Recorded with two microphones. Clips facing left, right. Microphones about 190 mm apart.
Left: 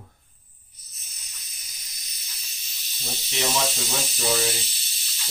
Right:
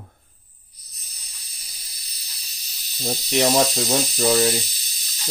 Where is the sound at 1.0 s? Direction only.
35° right (ahead or behind).